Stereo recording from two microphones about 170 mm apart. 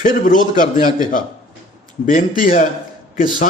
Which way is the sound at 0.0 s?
50° left (ahead or behind).